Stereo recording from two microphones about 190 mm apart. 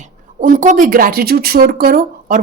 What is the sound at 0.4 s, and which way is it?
A woman's voice, 40° right (ahead or behind).